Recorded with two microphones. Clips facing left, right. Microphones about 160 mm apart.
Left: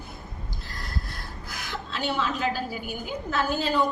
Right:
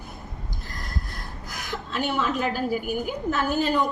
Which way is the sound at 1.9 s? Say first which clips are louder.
Right 3 dB; 50° right (ahead or behind).